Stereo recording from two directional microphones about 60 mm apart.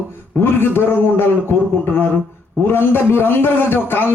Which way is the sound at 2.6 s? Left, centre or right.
Left.